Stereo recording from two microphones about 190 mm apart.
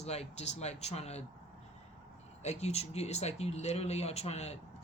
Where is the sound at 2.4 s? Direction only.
35° left (ahead or behind).